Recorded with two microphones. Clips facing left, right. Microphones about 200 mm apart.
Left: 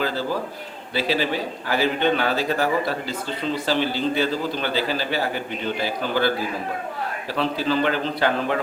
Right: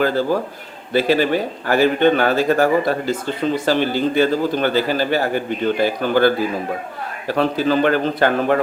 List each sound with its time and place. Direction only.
0.0 s speech: 50° right (ahead or behind)